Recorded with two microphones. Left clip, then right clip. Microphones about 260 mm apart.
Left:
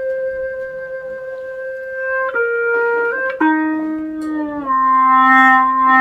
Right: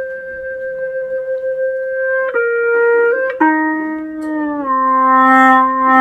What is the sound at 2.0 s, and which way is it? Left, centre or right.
Music, centre.